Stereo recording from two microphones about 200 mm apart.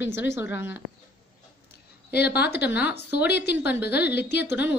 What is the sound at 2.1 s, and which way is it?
A woman's voice, 55° left (ahead or behind).